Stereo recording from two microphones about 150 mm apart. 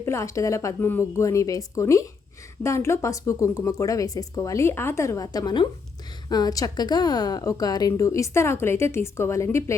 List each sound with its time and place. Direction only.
0.0 s a woman's voice: 20° left (ahead or behind)